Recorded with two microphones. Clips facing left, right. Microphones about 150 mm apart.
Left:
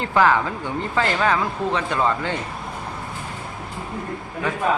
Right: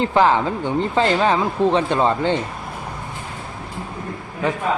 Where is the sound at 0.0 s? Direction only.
20° right (ahead or behind).